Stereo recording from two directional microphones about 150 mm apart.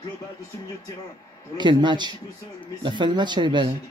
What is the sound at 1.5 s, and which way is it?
A man's voice, 30° right (ahead or behind).